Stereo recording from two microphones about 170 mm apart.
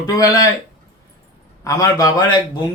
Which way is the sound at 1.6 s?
20° left (ahead or behind).